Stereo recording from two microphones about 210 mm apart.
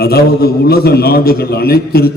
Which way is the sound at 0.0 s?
45° left (ahead or behind).